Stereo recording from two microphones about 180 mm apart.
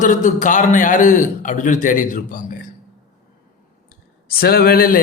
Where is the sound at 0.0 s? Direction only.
45° left (ahead or behind).